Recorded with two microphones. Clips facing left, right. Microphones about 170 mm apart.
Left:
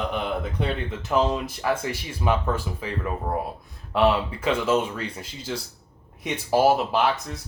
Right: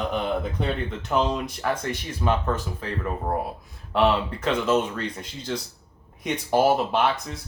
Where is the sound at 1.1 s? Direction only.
Centre (ahead or behind).